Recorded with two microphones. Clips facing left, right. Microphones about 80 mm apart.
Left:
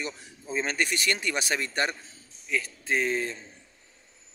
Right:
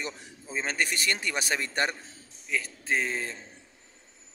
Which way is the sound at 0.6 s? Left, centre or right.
Right.